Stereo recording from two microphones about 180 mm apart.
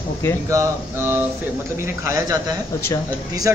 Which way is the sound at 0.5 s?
15° right (ahead or behind).